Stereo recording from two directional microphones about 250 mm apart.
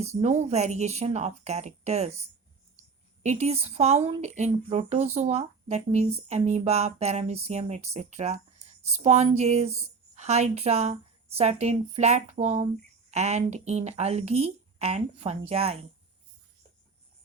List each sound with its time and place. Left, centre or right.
0.0 s speech: right
3.2 s speech: right